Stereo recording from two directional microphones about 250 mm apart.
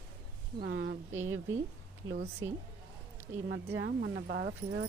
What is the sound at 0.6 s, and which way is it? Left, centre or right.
Speech, right.